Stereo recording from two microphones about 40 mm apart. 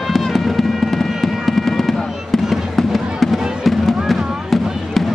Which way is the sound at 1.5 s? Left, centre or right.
Centre.